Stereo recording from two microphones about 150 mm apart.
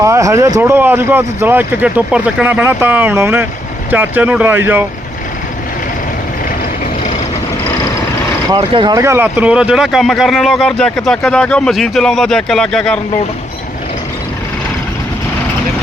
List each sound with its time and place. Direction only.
0.0 s speech: 20° right (ahead or behind)
8.4 s speech: 30° right (ahead or behind)
9.0 s speech: 15° right (ahead or behind); by 13.0 s 5° left (ahead or behind)